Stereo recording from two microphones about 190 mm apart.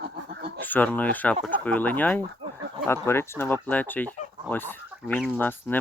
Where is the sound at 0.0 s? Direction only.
60° right (ahead or behind).